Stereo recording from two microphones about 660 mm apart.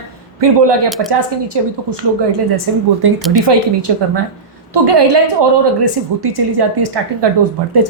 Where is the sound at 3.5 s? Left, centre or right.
Right.